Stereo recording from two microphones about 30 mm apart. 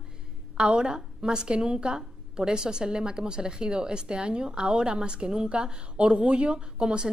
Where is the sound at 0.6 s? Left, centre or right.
Right.